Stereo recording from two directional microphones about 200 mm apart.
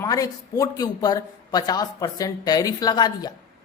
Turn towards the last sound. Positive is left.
turn(degrees=20)  # may be behind; listen again after turning